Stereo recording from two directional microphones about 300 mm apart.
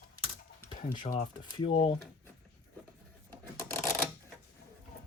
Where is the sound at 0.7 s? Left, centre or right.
Centre.